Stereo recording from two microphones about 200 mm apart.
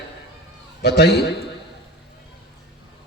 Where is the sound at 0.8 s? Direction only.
55° left (ahead or behind).